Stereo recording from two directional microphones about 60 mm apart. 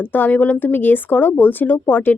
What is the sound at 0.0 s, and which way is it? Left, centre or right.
Speech, left.